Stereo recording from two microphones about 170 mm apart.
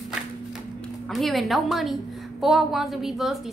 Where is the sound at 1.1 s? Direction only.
Centre (ahead or behind).